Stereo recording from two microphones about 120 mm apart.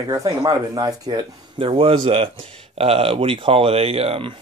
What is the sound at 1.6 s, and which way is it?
Speech, 50° right (ahead or behind).